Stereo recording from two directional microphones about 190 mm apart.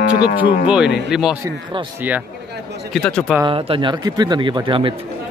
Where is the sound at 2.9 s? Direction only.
5° left (ahead or behind).